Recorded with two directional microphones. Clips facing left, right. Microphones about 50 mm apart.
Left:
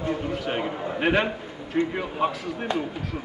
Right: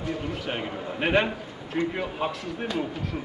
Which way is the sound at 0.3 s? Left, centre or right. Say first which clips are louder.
Left 3 dB; centre.